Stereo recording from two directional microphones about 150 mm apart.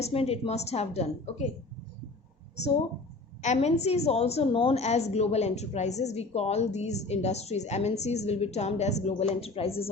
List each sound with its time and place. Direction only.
0.0 s a woman's voice: 45° left (ahead or behind)
3.4 s a woman's voice: 50° left (ahead or behind)